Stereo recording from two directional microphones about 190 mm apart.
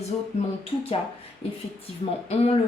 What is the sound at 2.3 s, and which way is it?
Speech, 35° left (ahead or behind).